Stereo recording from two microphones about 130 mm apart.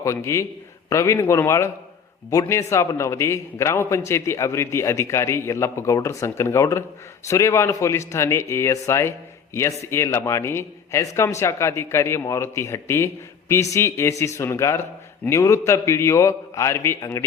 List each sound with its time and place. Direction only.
0.0 s a man's voice: 25° left (ahead or behind)